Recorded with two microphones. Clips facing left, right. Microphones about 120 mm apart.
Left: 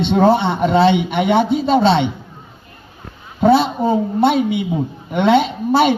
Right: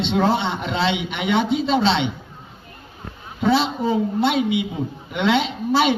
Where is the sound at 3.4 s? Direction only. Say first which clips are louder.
Left 6 dB; 50° left (ahead or behind).